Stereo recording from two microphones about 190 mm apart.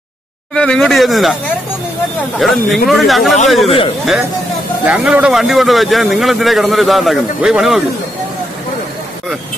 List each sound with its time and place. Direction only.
0.6 s a man's voice: 5° left (ahead or behind)
2.3 s a man's voice: centre (ahead or behind)
3.6 s a man's voice: 30° left (ahead or behind)
4.8 s a man's voice: 5° right (ahead or behind)